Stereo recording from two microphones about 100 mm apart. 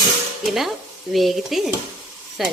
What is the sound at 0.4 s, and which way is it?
Stir, centre (ahead or behind).